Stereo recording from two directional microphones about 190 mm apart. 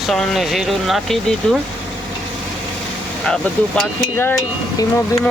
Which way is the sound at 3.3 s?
10° left (ahead or behind).